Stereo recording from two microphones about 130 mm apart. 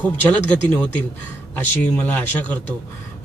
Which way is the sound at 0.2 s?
10° left (ahead or behind).